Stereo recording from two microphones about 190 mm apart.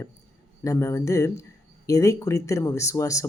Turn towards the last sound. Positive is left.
turn(degrees=15)  # may be behind; listen again after turning